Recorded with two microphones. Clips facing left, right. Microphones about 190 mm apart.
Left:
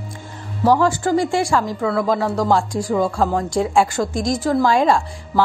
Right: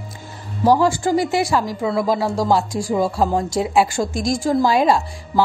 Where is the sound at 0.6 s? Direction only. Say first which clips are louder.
Even; 10° right (ahead or behind).